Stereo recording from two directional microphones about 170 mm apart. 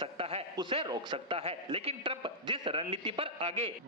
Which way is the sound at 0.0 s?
35° right (ahead or behind).